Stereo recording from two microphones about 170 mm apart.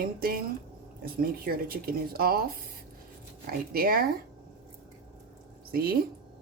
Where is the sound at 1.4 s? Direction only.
60° right (ahead or behind).